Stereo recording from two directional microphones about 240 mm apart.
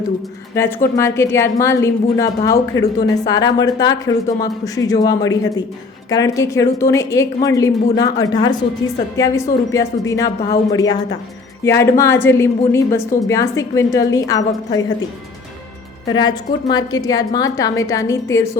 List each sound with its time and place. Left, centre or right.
0.5 s speech: centre
16.1 s speech: centre